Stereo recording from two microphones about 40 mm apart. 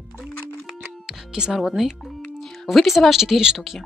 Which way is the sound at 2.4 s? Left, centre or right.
Centre.